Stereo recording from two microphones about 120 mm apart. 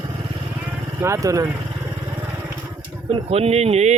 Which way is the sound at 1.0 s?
25° right (ahead or behind).